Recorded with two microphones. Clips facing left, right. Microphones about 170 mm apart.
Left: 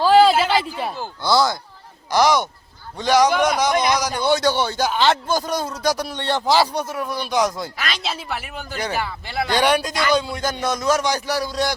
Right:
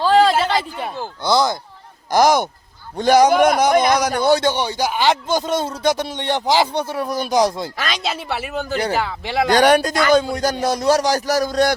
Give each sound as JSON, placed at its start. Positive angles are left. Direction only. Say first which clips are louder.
{"t": 0.0, "sound": "a sound", "louder": "left 1 dB", "side_deg": 5}
{"t": 1.2, "sound": "speech", "louder": "right 1 dB", "side_deg": -20}
{"t": 2.0, "sound": "a man's voice", "louder": "right 3 dB", "side_deg": -50}
{"t": 4.4, "sound": "speech", "louder": "even", "side_deg": -15}
{"t": 6.8, "sound": "speech", "louder": "right 4 dB", "side_deg": -30}
{"t": 9.0, "sound": "speech", "louder": "right 5 dB", "side_deg": -90}
{"t": 9.5, "sound": "a man's voice", "louder": "right 5 dB", "side_deg": -45}